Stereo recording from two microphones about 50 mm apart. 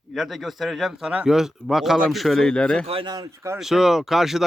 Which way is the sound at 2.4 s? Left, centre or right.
Centre.